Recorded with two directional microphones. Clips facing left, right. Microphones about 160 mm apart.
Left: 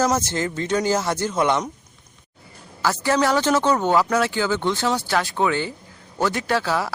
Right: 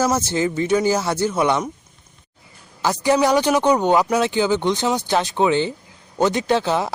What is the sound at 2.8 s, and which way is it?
Speech, 15° right (ahead or behind).